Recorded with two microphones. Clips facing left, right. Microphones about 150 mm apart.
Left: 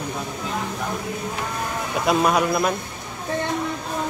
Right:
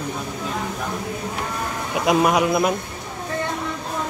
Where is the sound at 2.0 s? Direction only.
15° right (ahead or behind).